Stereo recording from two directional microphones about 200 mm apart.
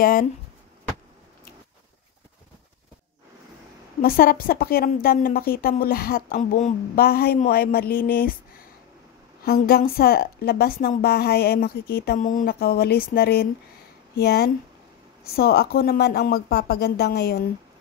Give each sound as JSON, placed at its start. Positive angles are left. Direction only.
{"t": 0.0, "sound": "a woman's voice", "side_deg": 45}
{"t": 4.0, "sound": "a woman's voice", "side_deg": 45}
{"t": 9.4, "sound": "a woman's voice", "side_deg": 50}